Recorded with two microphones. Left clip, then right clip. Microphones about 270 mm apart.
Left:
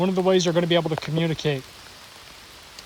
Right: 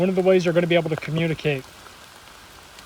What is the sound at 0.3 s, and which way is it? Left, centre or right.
Speech, centre.